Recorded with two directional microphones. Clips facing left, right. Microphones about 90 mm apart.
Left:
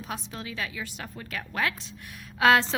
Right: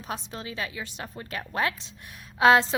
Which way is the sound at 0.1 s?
30° right (ahead or behind).